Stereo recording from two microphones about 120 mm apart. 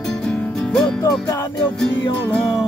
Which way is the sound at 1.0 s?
30° left (ahead or behind).